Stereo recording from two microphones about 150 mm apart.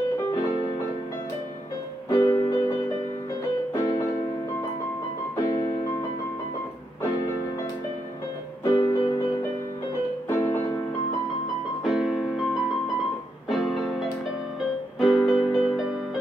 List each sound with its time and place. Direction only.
2.0 s music: 30° left (ahead or behind)
8.6 s music: 30° left (ahead or behind)
10.4 s music: 20° left (ahead or behind)
11.8 s music: centre (ahead or behind)
13.5 s music: centre (ahead or behind)